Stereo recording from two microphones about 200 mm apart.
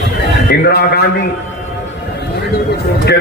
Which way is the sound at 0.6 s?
50° left (ahead or behind).